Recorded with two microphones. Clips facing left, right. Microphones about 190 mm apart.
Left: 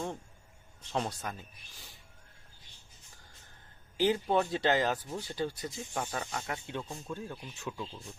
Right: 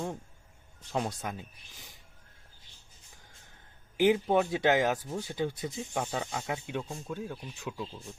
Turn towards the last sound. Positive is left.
turn(degrees=-10)  # may be behind; listen again after turning